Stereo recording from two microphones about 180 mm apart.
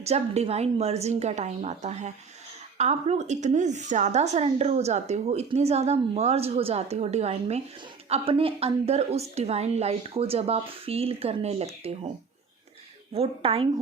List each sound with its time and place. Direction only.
0.0 s speech: 35° right (ahead or behind)
13.1 s speech: 30° right (ahead or behind)